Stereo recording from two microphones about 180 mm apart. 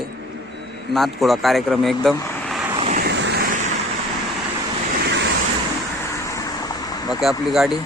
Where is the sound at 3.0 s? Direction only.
70° right (ahead or behind).